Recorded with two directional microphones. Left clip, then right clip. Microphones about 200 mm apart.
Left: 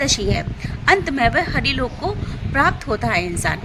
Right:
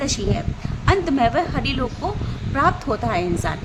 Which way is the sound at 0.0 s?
25° left (ahead or behind).